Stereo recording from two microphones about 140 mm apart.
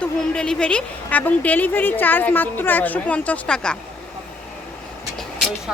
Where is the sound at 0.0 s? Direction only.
5° left (ahead or behind).